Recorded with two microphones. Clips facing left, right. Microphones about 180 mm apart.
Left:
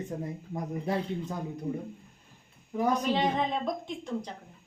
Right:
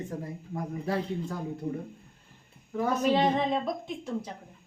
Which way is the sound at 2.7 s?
15° left (ahead or behind).